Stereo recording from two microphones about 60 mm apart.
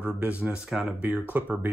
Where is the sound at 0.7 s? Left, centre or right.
Centre.